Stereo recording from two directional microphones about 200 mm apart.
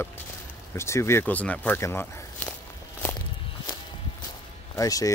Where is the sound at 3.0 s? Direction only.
10° left (ahead or behind).